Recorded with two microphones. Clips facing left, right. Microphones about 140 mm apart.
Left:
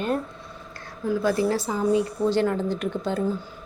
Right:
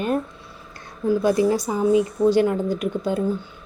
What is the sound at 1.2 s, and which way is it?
Speech, 15° right (ahead or behind).